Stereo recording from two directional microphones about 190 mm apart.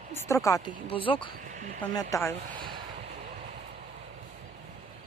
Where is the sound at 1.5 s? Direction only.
40° right (ahead or behind).